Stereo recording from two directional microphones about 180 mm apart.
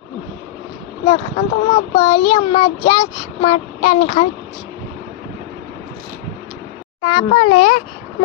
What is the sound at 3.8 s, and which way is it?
Speech, 40° left (ahead or behind).